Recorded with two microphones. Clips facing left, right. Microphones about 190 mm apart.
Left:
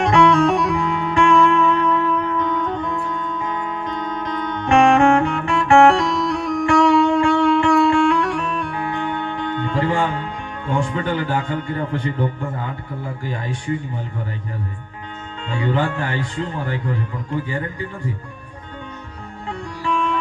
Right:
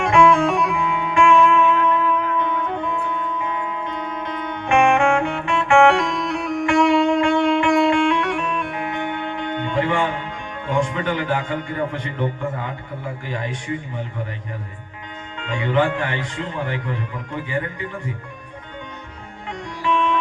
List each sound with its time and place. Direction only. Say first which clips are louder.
0.0 s music: left 1 dB; 35° left (ahead or behind)
1.6 s music: even; 10° right (ahead or behind)
3.4 s music: left 1 dB; 35° left (ahead or behind)
10.8 s speech: even; 35° left (ahead or behind)
13.2 s speech: left 3 dB; 35° left (ahead or behind)
15.4 s speech: right 1 dB; 35° left (ahead or behind)